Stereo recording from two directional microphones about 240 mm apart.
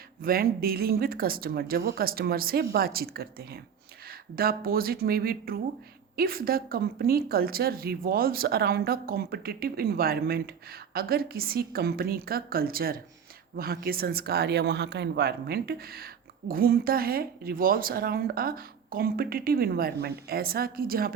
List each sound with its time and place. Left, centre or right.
0.2 s a woman's voice: right